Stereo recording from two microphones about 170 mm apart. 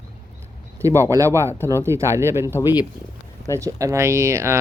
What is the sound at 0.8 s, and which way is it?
Speech, 15° right (ahead or behind).